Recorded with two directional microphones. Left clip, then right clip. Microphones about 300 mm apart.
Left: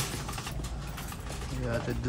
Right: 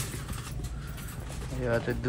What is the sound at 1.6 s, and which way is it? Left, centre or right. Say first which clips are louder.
Speech: right 5 dB; centre.